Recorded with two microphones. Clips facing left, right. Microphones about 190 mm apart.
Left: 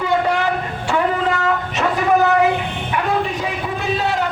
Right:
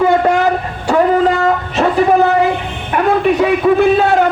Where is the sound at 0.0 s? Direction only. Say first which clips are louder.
Right 7 dB; 45° right (ahead or behind).